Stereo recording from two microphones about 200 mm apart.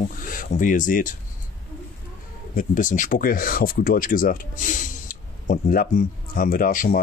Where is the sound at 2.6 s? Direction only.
40° left (ahead or behind).